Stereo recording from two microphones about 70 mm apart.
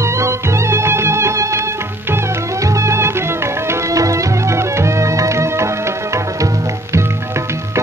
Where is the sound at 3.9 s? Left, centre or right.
Right.